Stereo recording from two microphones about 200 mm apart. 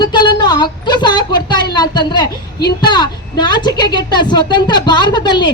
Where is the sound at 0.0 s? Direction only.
20° left (ahead or behind).